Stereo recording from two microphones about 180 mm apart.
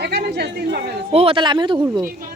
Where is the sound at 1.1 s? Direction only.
30° right (ahead or behind).